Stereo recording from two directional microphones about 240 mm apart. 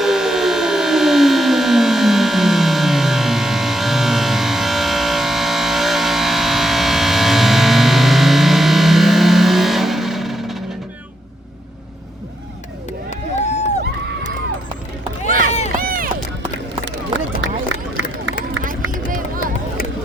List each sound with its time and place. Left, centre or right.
0.0 s a sound: centre
13.1 s run: left
15.3 s run: right
18.9 s run: right